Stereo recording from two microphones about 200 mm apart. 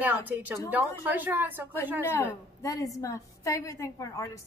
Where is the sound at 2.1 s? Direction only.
15° left (ahead or behind).